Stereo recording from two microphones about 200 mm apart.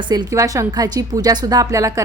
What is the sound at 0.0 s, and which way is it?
A woman's voice, 20° right (ahead or behind).